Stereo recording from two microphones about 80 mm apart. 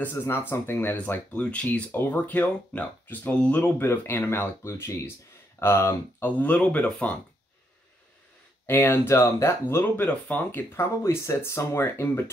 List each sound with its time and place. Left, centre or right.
0.0 s speech: left
6.3 s speech: centre
8.6 s speech: left